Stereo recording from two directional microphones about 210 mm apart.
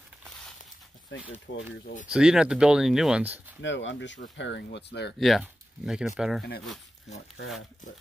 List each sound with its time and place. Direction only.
1.1 s speech: 60° left (ahead or behind)
2.0 s speech: 5° right (ahead or behind)
3.6 s speech: 60° left (ahead or behind)
5.2 s speech: centre (ahead or behind)